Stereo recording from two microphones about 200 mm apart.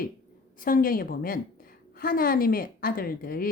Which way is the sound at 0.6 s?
45° left (ahead or behind).